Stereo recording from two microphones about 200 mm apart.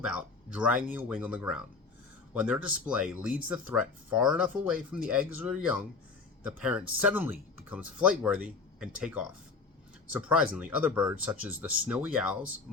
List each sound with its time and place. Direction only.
0.0 s speech: 5° right (ahead or behind)